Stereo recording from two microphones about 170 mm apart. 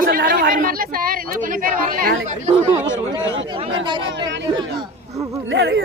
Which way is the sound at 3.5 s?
30° right (ahead or behind).